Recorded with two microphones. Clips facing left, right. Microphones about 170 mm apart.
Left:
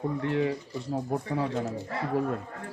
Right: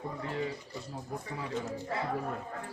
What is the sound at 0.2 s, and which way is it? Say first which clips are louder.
Speech: left 8 dB; 70° left (ahead or behind).